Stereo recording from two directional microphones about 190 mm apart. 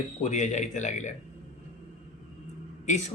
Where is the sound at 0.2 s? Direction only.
40° left (ahead or behind).